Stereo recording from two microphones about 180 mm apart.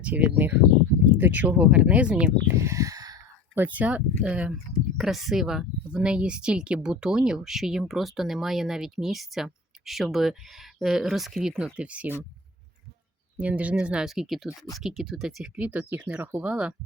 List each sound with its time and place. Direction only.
0.0 s speech: 10° right (ahead or behind)
2.6 s speech: 15° right (ahead or behind)
13.4 s speech: 5° right (ahead or behind)